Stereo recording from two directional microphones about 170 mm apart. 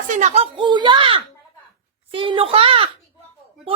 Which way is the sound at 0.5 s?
25° right (ahead or behind).